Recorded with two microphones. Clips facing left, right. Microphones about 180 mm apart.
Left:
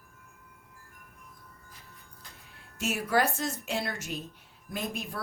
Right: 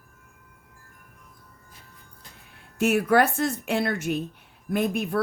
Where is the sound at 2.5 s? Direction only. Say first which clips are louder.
Right 11 dB; 60° right (ahead or behind).